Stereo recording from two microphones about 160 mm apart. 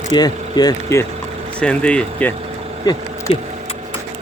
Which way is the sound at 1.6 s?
5° left (ahead or behind).